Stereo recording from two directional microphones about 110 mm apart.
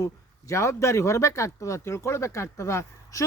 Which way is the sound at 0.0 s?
25° left (ahead or behind).